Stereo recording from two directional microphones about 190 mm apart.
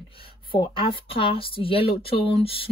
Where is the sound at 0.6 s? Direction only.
25° left (ahead or behind).